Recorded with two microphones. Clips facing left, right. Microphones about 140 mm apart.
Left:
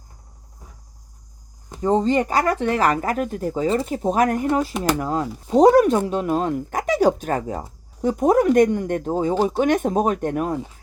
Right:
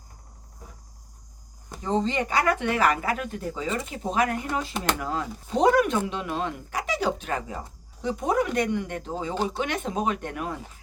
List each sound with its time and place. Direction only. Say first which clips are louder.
1.8 s speech: left 7 dB; 45° left (ahead or behind)